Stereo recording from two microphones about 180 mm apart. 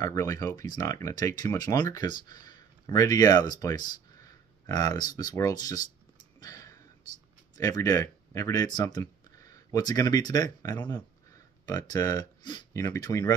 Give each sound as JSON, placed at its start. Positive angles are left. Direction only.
{"t": 0.0, "sound": "speech", "side_deg": 20}
{"t": 6.4, "sound": "a sound", "side_deg": 15}
{"t": 7.5, "sound": "speech", "side_deg": 20}